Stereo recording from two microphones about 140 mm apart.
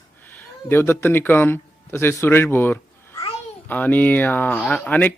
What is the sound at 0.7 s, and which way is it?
Speech, 15° left (ahead or behind).